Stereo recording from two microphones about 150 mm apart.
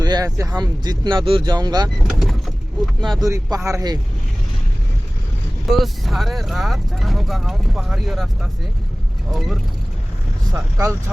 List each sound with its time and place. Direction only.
0.0 s speech: 25° right (ahead or behind)
2.0 s vehicle: centre (ahead or behind)
3.0 s speech: centre (ahead or behind)
3.2 s speech: 20° right (ahead or behind)
5.7 s speech: centre (ahead or behind)
10.5 s speech: 15° right (ahead or behind)